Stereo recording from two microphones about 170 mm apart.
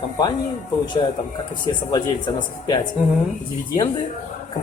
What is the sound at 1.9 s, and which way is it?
Speech, 25° left (ahead or behind).